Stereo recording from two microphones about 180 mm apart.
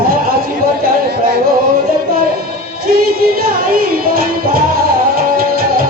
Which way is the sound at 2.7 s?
55° right (ahead or behind).